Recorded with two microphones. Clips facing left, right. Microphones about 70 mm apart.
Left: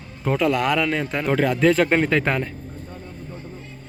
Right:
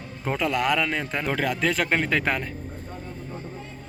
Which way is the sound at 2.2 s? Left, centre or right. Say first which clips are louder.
Left 3 dB; centre.